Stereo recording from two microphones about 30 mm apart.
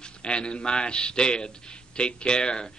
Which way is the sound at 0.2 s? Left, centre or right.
Left.